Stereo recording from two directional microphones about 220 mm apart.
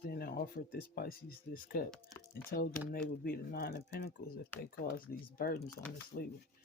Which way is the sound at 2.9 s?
40° left (ahead or behind).